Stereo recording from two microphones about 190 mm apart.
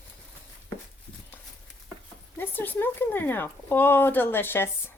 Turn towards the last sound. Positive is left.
turn(degrees=10)  # may be behind; listen again after turning